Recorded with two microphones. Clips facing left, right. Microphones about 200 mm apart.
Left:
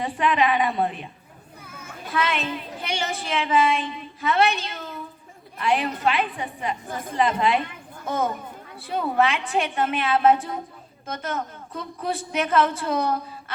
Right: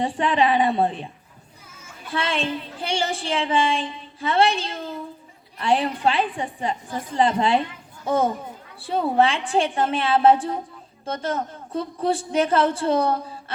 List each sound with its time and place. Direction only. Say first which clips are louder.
0.0 s a woman's voice: right 2 dB; 30° right (ahead or behind)
1.6 s children playing: left 6 dB; 60° left (ahead or behind)
2.0 s a woman's voice: right 1 dB; 30° right (ahead or behind)